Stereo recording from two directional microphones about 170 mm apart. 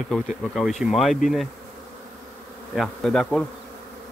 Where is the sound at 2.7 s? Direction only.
Centre (ahead or behind).